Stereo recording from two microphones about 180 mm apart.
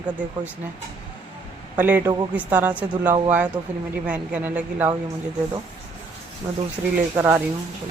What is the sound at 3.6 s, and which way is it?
Speech, 25° right (ahead or behind).